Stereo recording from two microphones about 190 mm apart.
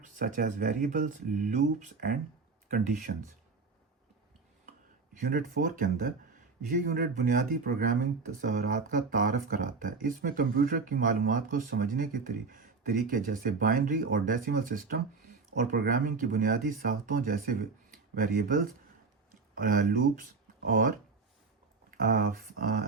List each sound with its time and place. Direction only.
0.0 s speech: 50° right (ahead or behind)
5.1 s speech: 45° right (ahead or behind)
19.3 s a sound: 50° right (ahead or behind)
20.6 s speech: 45° right (ahead or behind)